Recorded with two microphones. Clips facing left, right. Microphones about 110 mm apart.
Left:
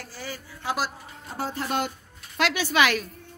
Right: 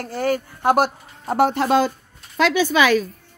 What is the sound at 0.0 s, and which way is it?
Speech, 65° right (ahead or behind).